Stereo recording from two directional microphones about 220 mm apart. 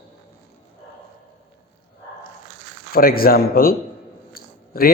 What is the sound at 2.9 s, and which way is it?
A man's voice, 40° left (ahead or behind).